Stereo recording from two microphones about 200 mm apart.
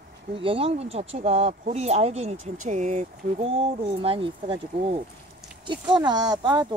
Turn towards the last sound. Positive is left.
turn(degrees=-20)  # may be behind; listen again after turning